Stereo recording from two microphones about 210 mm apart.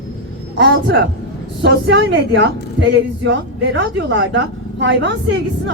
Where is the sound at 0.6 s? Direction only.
60° right (ahead or behind).